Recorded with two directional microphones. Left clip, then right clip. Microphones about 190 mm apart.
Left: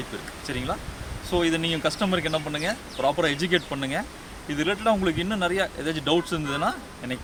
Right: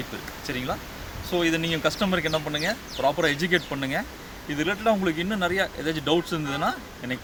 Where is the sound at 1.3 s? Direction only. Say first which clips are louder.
Even; 10° right (ahead or behind).